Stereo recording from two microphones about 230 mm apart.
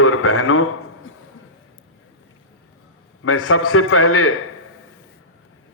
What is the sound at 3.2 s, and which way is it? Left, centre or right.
A man's voice, left.